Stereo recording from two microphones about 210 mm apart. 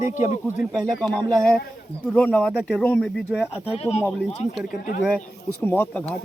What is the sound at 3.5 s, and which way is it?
Speech, 30° left (ahead or behind).